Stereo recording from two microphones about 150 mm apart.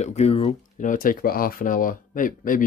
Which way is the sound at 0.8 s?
65° left (ahead or behind).